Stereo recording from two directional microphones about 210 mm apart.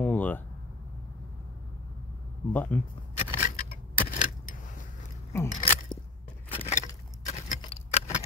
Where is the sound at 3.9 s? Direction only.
40° left (ahead or behind).